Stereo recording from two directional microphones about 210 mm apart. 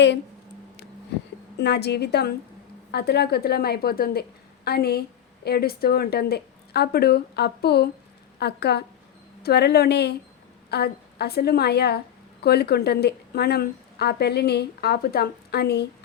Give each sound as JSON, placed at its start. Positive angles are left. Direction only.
{"t": 1.5, "sound": "a woman's voice", "side_deg": 55}